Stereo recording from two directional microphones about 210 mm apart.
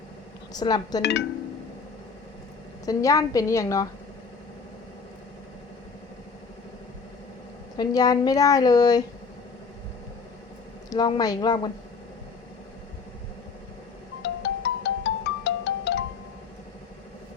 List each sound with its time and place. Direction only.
0.5 s a woman's voice: 20° left (ahead or behind)
2.8 s a woman's voice: 15° left (ahead or behind)
7.8 s a woman's voice: 20° left (ahead or behind)
10.8 s a woman's voice: 20° left (ahead or behind)
14.2 s music: 55° left (ahead or behind)